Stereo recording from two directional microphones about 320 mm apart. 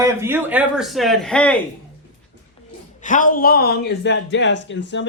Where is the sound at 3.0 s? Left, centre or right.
Left.